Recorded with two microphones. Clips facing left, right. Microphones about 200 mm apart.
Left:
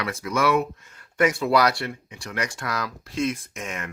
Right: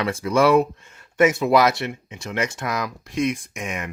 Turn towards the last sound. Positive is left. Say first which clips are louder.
# right 3 dB
turn(degrees=-15)  # may be behind; listen again after turning